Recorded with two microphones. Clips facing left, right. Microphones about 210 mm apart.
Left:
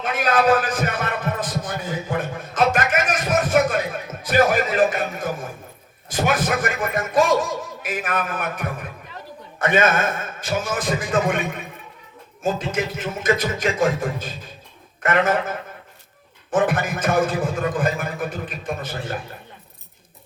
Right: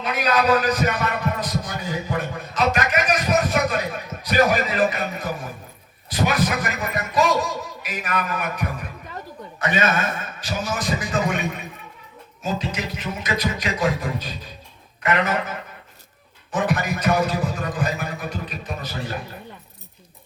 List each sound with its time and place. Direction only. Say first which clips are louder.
0.0 s heart sounds: left 2 dB; 50° left (ahead or behind)
4.2 s a man's voice: left 1 dB; 50° left (ahead or behind)